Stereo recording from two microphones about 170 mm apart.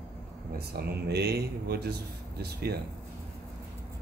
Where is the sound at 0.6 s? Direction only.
70° right (ahead or behind).